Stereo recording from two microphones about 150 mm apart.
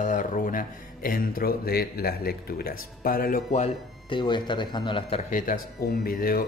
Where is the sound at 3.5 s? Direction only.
45° left (ahead or behind).